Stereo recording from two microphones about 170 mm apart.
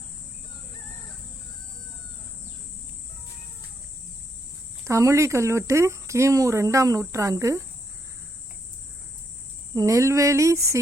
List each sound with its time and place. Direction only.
4.9 s speech: 15° right (ahead or behind)
9.7 s speech: 20° right (ahead or behind)